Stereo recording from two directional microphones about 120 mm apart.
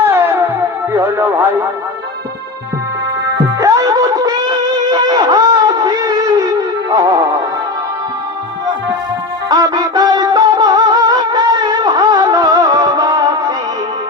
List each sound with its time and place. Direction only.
0.0 s music: 20° right (ahead or behind)
0.9 s speech: 20° right (ahead or behind)
3.6 s a sound: 30° right (ahead or behind)
6.9 s music: 30° right (ahead or behind)
9.5 s music: 35° right (ahead or behind)